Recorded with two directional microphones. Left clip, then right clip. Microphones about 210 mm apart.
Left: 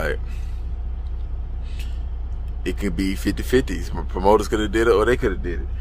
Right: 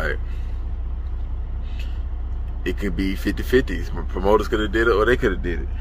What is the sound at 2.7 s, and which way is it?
Speech, 15° left (ahead or behind).